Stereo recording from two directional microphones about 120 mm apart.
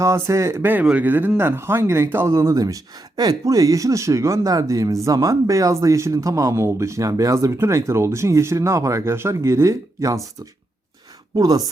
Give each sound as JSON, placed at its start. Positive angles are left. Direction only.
{"t": 0.0, "sound": "speech", "side_deg": -25}
{"t": 11.3, "sound": "speech", "side_deg": -30}